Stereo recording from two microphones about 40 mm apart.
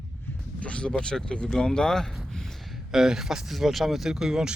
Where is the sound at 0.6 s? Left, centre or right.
Left.